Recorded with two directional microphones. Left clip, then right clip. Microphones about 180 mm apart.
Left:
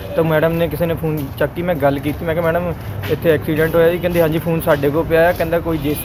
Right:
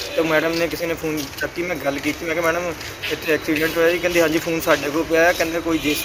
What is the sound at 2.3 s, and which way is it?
Speech, 10° left (ahead or behind).